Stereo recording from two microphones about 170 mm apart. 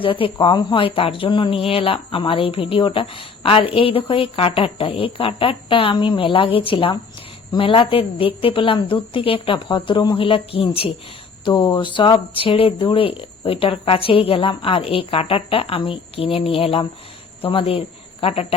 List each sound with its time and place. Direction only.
0.0 s speech: 30° left (ahead or behind)